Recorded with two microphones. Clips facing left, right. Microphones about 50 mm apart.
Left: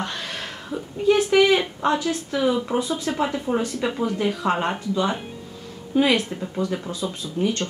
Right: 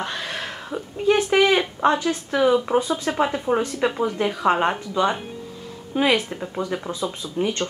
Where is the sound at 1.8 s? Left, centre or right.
Centre.